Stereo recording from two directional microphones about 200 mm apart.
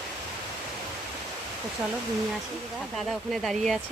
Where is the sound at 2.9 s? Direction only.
Centre (ahead or behind).